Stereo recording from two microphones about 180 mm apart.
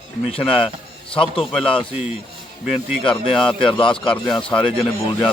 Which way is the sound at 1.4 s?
5° left (ahead or behind).